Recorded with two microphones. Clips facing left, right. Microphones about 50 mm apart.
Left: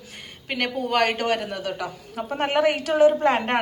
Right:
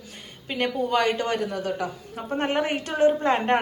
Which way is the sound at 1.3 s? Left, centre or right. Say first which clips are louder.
Even; left.